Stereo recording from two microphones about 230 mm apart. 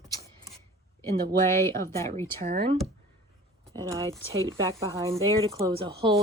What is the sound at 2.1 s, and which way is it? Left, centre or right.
Speech, right.